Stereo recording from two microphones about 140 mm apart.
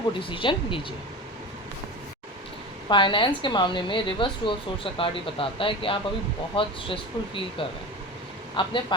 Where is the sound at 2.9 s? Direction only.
35° left (ahead or behind).